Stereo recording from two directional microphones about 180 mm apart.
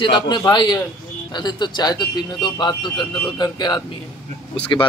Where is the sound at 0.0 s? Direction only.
25° left (ahead or behind).